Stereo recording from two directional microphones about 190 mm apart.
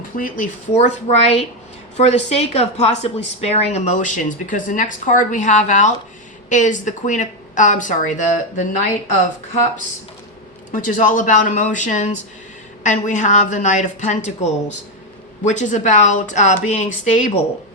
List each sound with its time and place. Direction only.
0.2 s a woman's voice: 45° left (ahead or behind)
10.7 s a woman's voice: 40° left (ahead or behind)